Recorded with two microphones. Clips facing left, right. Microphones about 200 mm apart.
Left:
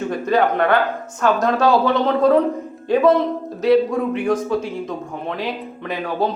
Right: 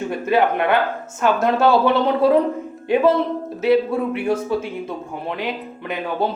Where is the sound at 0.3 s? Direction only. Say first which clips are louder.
Left 1 dB; 5° right (ahead or behind).